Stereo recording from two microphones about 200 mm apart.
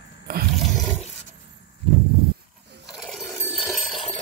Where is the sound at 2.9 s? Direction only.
Centre (ahead or behind).